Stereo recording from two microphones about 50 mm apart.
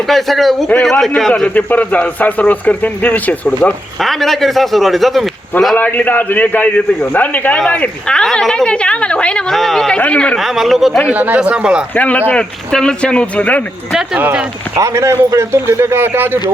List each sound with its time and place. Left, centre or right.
0.1 s a man's voice: centre
1.5 s speech: left
4.0 s a man's voice: centre
5.7 s speech: left
8.0 s a woman's voice: centre
9.5 s speech: centre
10.0 s a woman's voice: left
10.3 s a man's voice: centre
11.1 s speech: right
11.4 s speech: right
11.9 s speech: left
12.3 s a woman's voice: centre
14.8 s a man's voice: right
15.4 s speech: right